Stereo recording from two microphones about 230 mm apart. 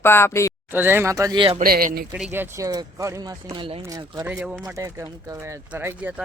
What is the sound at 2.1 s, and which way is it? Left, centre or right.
Speech, centre.